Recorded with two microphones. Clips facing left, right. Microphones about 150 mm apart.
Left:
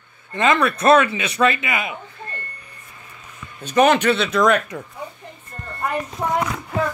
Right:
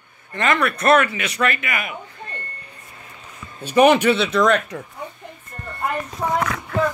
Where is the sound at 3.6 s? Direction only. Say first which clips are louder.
Right 2 dB; 10° right (ahead or behind).